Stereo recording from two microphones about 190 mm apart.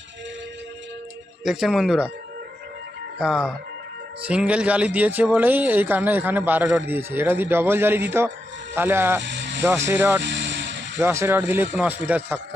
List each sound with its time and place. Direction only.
1.5 s speech: centre (ahead or behind)
3.2 s a man's voice: centre (ahead or behind)
9.2 s vehicle: 70° right (ahead or behind)
9.6 s a man's voice: 10° right (ahead or behind)
10.2 s vehicle: 70° right (ahead or behind)
10.9 s a man's voice: 15° right (ahead or behind)